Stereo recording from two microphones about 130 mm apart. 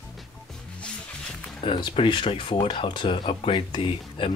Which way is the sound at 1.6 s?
40° left (ahead or behind).